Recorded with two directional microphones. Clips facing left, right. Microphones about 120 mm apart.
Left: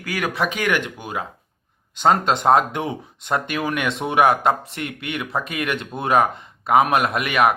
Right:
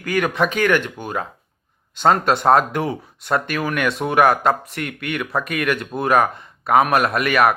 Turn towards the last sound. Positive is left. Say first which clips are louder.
# right 2 dB
turn(degrees=20)  # may be behind; listen again after turning